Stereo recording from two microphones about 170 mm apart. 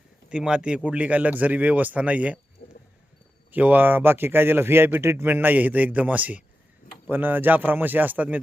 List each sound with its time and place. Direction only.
0.3 s a man's voice: 5° right (ahead or behind)
3.5 s a man's voice: 10° right (ahead or behind)